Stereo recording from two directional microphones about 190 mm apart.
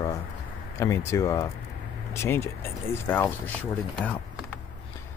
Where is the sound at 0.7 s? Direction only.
15° left (ahead or behind).